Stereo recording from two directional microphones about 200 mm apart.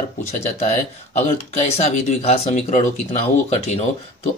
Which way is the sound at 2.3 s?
35° left (ahead or behind).